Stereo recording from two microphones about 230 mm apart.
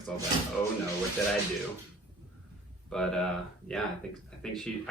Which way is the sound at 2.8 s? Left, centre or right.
Centre.